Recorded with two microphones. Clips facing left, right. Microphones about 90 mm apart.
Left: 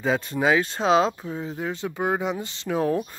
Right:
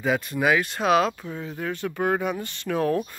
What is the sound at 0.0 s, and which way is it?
Speech, 25° left (ahead or behind).